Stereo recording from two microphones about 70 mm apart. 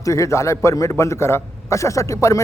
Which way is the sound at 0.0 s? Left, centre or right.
Left.